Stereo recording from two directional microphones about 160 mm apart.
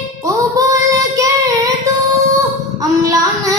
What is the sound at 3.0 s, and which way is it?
Child singing, 20° right (ahead or behind).